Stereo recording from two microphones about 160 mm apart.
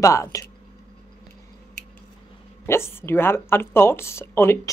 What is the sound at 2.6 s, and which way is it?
Speech, 15° left (ahead or behind).